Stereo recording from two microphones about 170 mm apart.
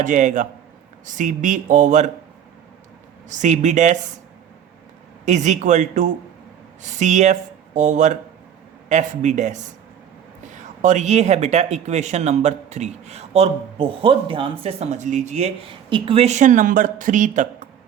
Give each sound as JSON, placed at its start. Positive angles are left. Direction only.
{"t": 0.0, "sound": "speech", "side_deg": -45}
{"t": 3.2, "sound": "speech", "side_deg": -45}
{"t": 5.2, "sound": "speech", "side_deg": -45}
{"t": 10.8, "sound": "speech", "side_deg": -45}